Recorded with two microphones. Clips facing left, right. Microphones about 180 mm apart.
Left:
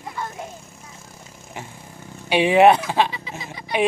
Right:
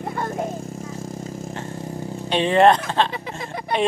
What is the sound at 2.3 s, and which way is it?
Speech, 10° left (ahead or behind).